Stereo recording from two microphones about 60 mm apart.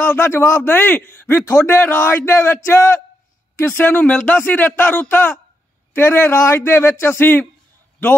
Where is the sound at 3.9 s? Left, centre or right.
Left.